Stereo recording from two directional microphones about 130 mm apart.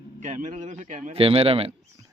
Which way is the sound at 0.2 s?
70° right (ahead or behind).